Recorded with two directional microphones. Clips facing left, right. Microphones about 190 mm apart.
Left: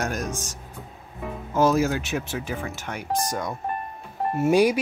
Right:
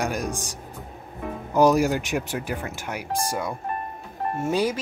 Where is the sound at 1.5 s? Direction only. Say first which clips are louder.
Right 2 dB; 15° right (ahead or behind).